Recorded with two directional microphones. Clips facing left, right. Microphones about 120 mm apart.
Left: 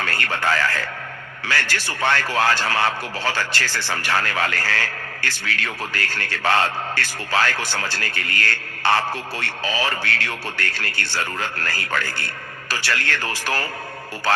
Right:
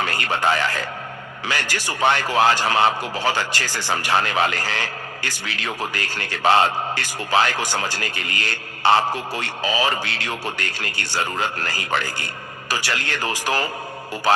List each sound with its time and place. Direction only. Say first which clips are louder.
0.0 s a man's voice: right 2 dB; 15° right (ahead or behind)